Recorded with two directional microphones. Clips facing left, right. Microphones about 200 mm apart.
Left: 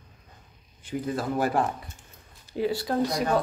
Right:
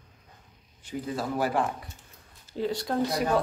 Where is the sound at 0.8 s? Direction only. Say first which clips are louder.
Left 3 dB; 50° left (ahead or behind).